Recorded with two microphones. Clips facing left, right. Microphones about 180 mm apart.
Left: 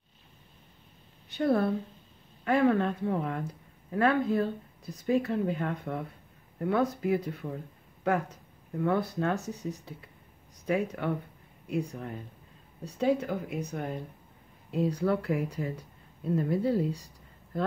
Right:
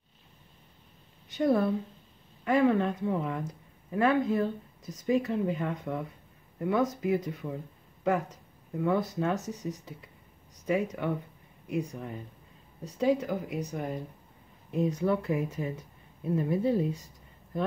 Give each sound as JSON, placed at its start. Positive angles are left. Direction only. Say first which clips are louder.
{"t": 1.3, "sound": "speech", "louder": "right 1 dB", "side_deg": -15}